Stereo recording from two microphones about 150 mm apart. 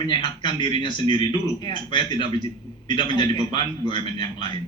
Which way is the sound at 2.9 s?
30° left (ahead or behind).